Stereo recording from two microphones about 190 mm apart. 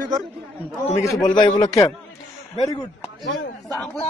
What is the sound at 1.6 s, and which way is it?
Speech, 15° left (ahead or behind).